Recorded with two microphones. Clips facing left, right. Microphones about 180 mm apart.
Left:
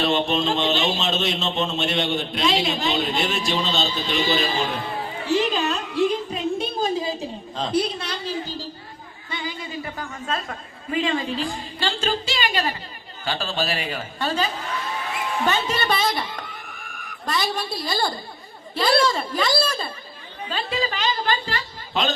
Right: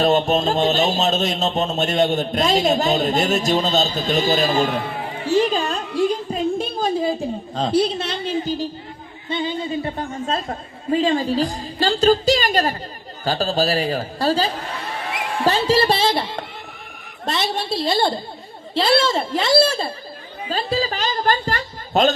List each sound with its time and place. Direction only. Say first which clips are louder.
0.0 s speech: right 4 dB; 40° right (ahead or behind)
5.3 s a sound: right 3 dB; 45° right (ahead or behind)
7.6 s a woman's voice: right 4 dB; 30° right (ahead or behind)
20.5 s speech: right 4 dB; 40° right (ahead or behind)